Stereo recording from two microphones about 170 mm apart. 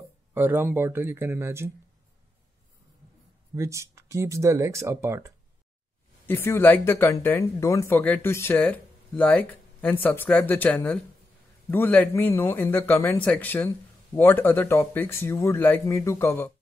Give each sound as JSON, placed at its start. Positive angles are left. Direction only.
{"t": 0.3, "sound": "speech", "side_deg": -10}
{"t": 3.5, "sound": "speech", "side_deg": -15}
{"t": 6.2, "sound": "speech", "side_deg": 15}